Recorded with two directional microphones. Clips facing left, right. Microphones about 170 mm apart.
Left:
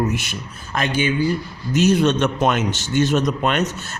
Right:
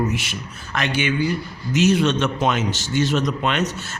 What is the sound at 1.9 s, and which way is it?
A man's voice, 45° left (ahead or behind).